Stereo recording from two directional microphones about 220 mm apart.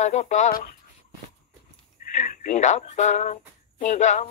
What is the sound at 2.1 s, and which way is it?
Speech, 35° left (ahead or behind).